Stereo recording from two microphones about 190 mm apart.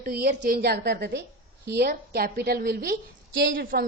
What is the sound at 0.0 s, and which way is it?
A woman's voice, 55° right (ahead or behind).